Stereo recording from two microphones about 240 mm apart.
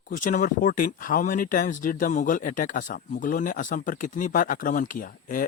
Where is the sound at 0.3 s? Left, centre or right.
Left.